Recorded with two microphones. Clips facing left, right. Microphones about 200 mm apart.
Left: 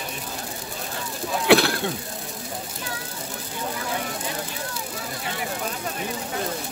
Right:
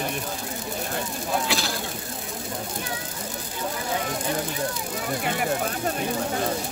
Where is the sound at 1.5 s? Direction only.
65° left (ahead or behind).